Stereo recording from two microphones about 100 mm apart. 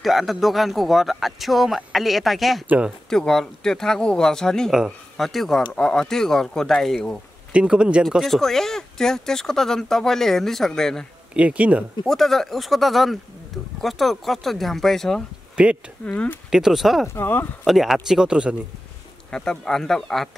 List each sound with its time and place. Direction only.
0.0 s speech: centre (ahead or behind)
7.5 s speech: 10° right (ahead or behind)
11.3 s speech: 15° right (ahead or behind)
12.1 s speech: 5° left (ahead or behind)
15.5 s speech: 10° right (ahead or behind)
16.1 s speech: 10° left (ahead or behind)
16.4 s speech: 5° right (ahead or behind)
17.1 s speech: 20° left (ahead or behind)
17.6 s speech: centre (ahead or behind)
19.3 s speech: 10° left (ahead or behind)